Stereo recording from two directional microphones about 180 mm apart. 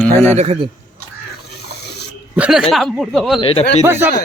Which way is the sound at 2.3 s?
5° right (ahead or behind).